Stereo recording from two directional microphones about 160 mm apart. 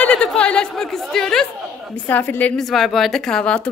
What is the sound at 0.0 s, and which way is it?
Speech, 5° left (ahead or behind).